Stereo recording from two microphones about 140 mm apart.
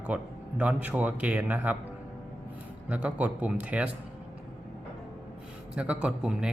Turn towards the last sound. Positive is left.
turn(degrees=-5)  # may be behind; listen again after turning